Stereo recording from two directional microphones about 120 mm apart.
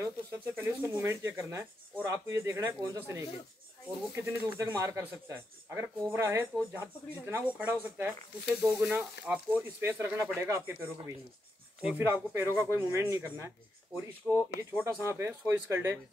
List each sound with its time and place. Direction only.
0.0 s speech: 20° right (ahead or behind)
12.0 s speech: 20° right (ahead or behind)
14.2 s speech: 10° left (ahead or behind)
14.8 s speech: 20° right (ahead or behind)